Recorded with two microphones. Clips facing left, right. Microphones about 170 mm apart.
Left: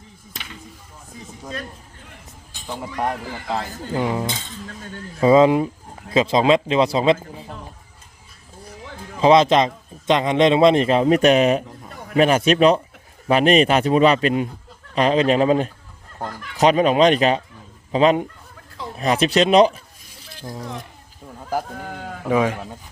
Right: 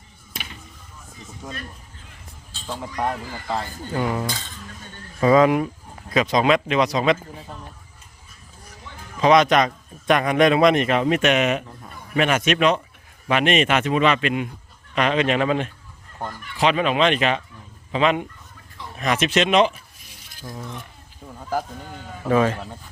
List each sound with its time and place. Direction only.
2.5 s speech: 15° left (ahead or behind)
3.9 s a man's voice: 20° left (ahead or behind)
9.2 s a man's voice: 25° left (ahead or behind)
20.3 s a sound: 25° left (ahead or behind)
21.8 s speech: 75° left (ahead or behind)
22.2 s speech: 10° left (ahead or behind)